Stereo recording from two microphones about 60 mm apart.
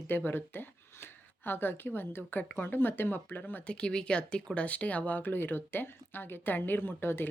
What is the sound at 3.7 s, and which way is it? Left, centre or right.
A woman's voice, centre.